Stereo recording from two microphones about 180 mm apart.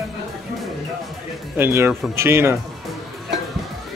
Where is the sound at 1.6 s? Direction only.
15° right (ahead or behind).